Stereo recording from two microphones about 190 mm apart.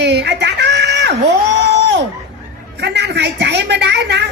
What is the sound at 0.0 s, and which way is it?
Screaming, 65° right (ahead or behind).